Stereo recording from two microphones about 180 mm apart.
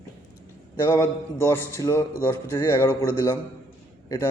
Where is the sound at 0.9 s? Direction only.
15° left (ahead or behind).